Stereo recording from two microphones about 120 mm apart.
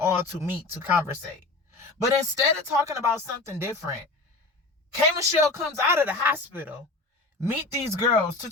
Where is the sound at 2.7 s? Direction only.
25° right (ahead or behind).